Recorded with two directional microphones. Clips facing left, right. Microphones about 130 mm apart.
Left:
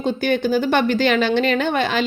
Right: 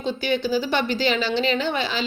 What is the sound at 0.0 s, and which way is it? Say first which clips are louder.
A woman's voice: left 4 dB; 50° left (ahead or behind).